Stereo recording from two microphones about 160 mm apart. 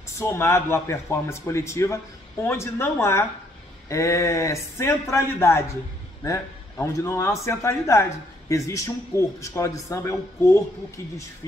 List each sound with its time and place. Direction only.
0.2 s a man's voice: 15° left (ahead or behind)